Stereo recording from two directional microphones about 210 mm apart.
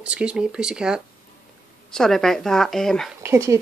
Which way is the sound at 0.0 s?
5° right (ahead or behind).